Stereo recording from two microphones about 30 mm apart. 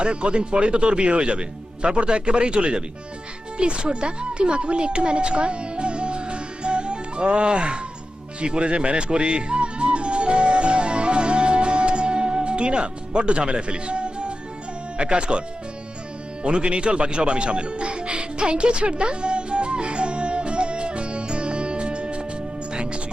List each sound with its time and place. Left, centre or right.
0.0 s speech: right
8.4 s music: right
14.9 s speech: right
16.4 s music: right